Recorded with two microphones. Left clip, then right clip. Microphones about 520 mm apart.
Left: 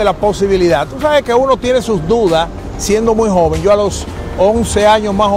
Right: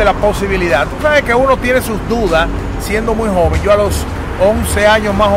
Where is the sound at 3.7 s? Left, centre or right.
Left.